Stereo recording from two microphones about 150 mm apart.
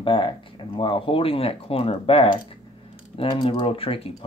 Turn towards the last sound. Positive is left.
turn(degrees=40)  # may be behind; listen again after turning